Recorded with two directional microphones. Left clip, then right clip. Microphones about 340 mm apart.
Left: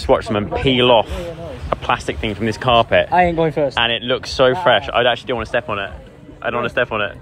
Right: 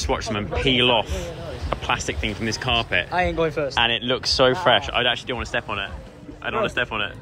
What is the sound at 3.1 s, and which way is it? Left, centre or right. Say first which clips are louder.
Speech: left 7 dB; left.